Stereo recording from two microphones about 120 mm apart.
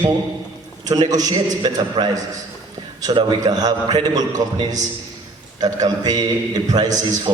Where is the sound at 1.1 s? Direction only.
30° right (ahead or behind).